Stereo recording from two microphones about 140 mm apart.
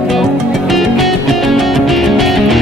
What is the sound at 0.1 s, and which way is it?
Music, centre (ahead or behind).